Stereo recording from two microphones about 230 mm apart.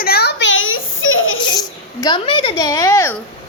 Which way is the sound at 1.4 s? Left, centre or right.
Centre.